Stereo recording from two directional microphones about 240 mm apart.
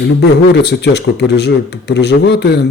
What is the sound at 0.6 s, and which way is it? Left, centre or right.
A man's voice, left.